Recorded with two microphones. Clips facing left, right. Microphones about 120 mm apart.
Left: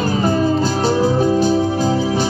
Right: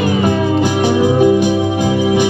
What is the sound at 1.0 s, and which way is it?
Organ, 10° right (ahead or behind).